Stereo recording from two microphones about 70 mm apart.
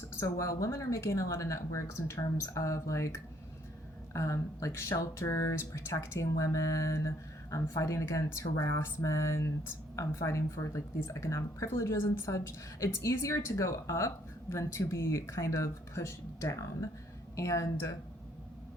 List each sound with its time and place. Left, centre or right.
0.2 s speech: left